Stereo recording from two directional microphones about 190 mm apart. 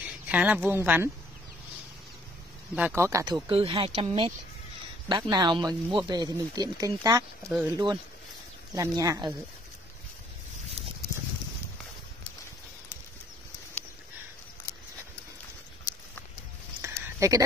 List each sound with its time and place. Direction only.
0.0 s a woman's voice: 5° right (ahead or behind)
2.7 s speech: 10° right (ahead or behind)
16.8 s a sound: 15° right (ahead or behind)